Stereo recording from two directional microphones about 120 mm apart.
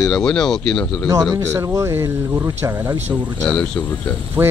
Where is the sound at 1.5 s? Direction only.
25° right (ahead or behind).